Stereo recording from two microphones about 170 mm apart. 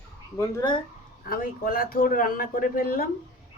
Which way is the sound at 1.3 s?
55° left (ahead or behind).